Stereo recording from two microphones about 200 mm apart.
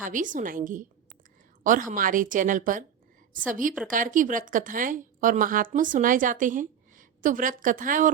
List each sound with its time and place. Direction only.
0.0 s a woman's voice: 40° right (ahead or behind)